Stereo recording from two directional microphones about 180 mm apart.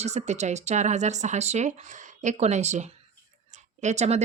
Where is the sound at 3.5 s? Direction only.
40° right (ahead or behind).